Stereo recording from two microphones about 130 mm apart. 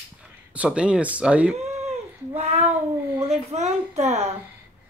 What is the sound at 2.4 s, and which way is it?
A woman's voice, 55° right (ahead or behind).